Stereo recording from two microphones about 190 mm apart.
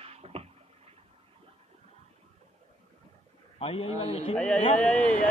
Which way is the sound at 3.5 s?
30° left (ahead or behind).